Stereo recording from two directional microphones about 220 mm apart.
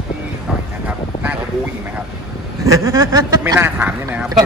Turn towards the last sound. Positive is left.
turn(degrees=-10)  # may be behind; listen again after turning